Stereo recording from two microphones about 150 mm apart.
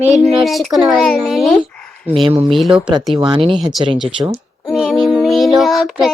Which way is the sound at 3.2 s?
35° right (ahead or behind).